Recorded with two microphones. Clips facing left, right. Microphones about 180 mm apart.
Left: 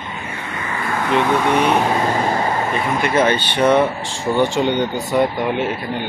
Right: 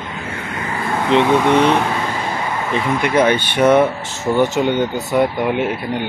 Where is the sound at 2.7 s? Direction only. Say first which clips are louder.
Right 1 dB; 15° right (ahead or behind).